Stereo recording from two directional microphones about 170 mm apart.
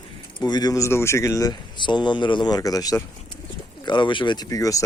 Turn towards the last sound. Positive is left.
turn(degrees=20)  # may be behind; listen again after turning